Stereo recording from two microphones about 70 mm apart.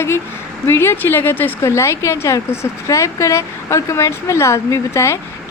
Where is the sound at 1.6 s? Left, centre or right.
Left.